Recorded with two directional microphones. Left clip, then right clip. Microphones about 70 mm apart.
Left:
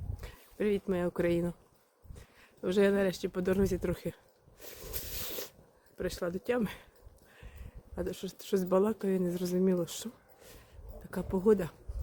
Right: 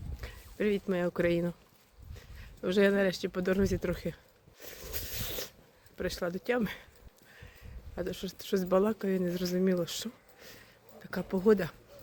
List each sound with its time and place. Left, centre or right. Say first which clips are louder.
0.2 s dog: right 4 dB; left
0.7 s speech: even; left
2.6 s speech: right 1 dB; centre
3.2 s speech: right 1 dB; left
3.5 s speech: even; left
4.6 s a sound: right 2 dB; left
6.0 s speech: right 1 dB; left
6.2 s speech: right 1 dB; left
8.0 s speech: right 1 dB; left
11.3 s speech: right 1 dB; left